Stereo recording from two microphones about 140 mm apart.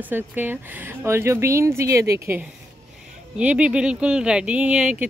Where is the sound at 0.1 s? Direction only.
15° right (ahead or behind).